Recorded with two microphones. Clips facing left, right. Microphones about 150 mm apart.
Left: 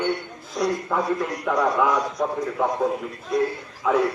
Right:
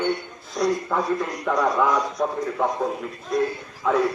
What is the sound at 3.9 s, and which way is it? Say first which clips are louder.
Speech: even; 5° left (ahead or behind).